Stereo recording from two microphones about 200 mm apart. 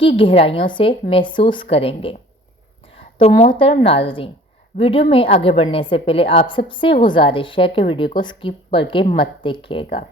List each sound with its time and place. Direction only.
0.0 s a woman's voice: 25° left (ahead or behind)
3.2 s a woman's voice: 30° left (ahead or behind)